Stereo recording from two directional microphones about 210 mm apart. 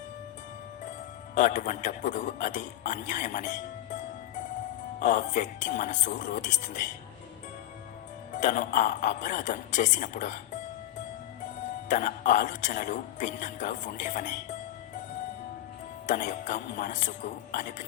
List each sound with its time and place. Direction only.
1.4 s a man's voice: 40° left (ahead or behind)
8.3 s a man's voice: 35° left (ahead or behind)
11.9 s a man's voice: 40° left (ahead or behind)
16.0 s a man's voice: 35° left (ahead or behind)